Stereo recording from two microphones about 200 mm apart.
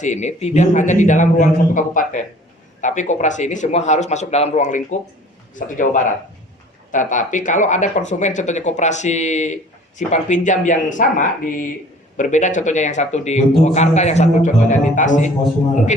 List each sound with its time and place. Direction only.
0.0 s speech: 35° left (ahead or behind)